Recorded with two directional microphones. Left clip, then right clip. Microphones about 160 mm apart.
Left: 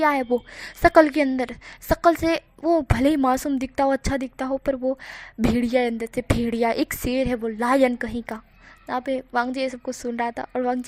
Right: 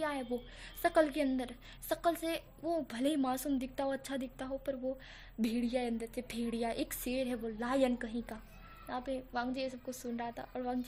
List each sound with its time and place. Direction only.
0.0 s a woman's voice: 45° left (ahead or behind)